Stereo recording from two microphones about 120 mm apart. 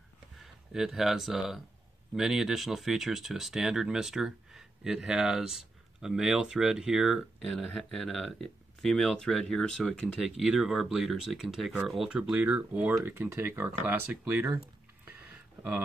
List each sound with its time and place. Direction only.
0.4 s speech: centre (ahead or behind)